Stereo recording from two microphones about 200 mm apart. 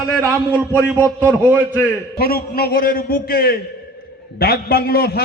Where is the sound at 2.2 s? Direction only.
50° left (ahead or behind).